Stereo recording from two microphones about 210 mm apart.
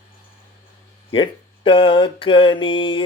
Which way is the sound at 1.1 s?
25° left (ahead or behind).